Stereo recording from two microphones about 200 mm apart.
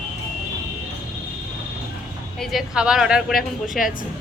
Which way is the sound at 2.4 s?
Centre (ahead or behind).